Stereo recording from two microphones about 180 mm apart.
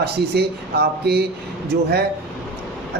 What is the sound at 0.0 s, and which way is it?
Speech, 65° right (ahead or behind).